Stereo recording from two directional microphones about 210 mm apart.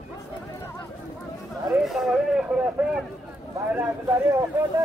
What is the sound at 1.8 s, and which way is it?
Speech, centre (ahead or behind).